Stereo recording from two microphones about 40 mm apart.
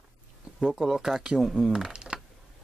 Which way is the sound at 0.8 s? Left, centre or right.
Centre.